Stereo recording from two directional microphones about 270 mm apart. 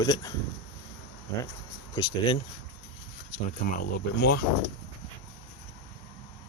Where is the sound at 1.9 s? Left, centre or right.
Centre.